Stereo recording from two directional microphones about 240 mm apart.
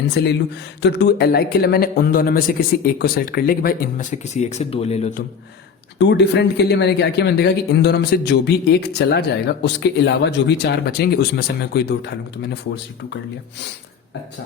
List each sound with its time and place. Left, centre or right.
0.2 s speech: left
6.0 s speech: left